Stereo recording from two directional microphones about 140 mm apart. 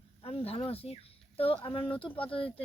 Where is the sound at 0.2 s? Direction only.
45° left (ahead or behind).